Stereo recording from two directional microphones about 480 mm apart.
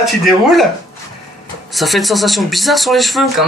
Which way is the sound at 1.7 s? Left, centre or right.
Centre.